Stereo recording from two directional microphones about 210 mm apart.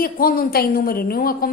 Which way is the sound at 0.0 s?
45° left (ahead or behind).